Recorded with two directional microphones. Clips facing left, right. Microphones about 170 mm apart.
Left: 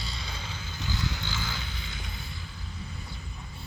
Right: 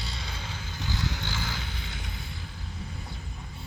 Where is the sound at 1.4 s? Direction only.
70° right (ahead or behind).